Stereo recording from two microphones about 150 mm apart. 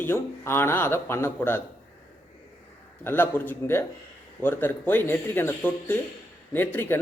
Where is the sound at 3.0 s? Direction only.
15° left (ahead or behind).